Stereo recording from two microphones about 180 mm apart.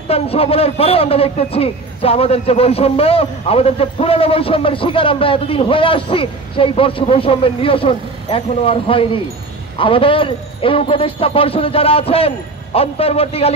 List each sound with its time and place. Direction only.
0.1 s a man's voice: 35° left (ahead or behind)